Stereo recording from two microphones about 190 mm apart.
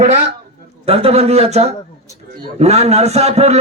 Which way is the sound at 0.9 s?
30° right (ahead or behind).